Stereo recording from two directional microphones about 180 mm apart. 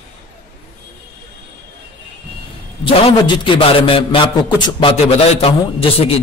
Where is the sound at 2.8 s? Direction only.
25° left (ahead or behind).